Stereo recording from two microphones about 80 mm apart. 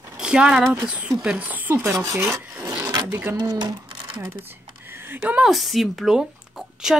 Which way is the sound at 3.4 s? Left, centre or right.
Right.